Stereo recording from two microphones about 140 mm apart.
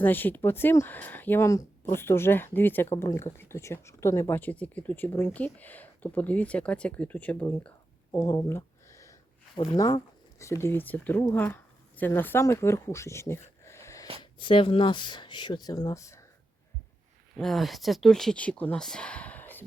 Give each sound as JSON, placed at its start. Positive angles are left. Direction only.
{"t": 0.0, "sound": "speech", "side_deg": 15}
{"t": 8.1, "sound": "a sound", "side_deg": 20}
{"t": 9.6, "sound": "speech", "side_deg": 25}
{"t": 14.2, "sound": "speech", "side_deg": 35}
{"t": 17.3, "sound": "speech", "side_deg": 0}